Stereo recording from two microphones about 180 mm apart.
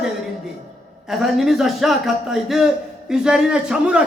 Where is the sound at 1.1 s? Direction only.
Centre (ahead or behind).